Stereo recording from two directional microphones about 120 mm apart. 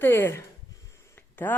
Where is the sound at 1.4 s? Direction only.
15° left (ahead or behind).